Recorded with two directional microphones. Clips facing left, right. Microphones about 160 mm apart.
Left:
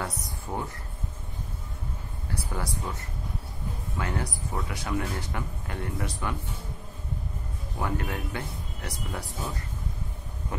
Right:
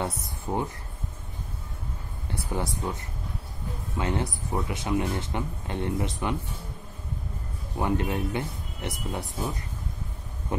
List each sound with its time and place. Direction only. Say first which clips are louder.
0.0 s speech: right 3 dB; 20° right (ahead or behind)
2.2 s speech: right 3 dB; 20° right (ahead or behind)
7.8 s speech: right 5 dB; 20° right (ahead or behind)